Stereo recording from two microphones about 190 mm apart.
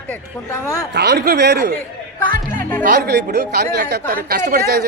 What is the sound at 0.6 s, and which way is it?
Speech, 15° left (ahead or behind).